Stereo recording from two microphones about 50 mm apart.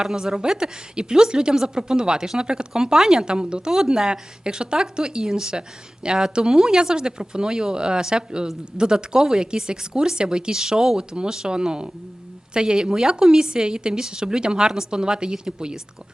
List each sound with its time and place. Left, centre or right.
0.0 s speech: centre